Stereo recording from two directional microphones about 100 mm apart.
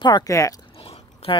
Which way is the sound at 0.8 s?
70° left (ahead or behind).